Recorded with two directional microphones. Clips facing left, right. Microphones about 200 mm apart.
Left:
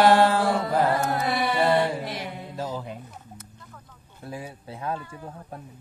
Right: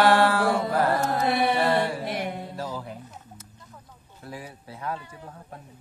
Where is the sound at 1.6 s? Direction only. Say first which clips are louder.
Left 2 dB; 20° left (ahead or behind).